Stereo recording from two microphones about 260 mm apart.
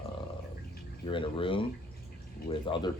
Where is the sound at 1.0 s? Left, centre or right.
Centre.